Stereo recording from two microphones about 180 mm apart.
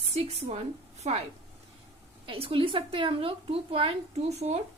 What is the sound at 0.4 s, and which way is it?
Speech, 35° right (ahead or behind).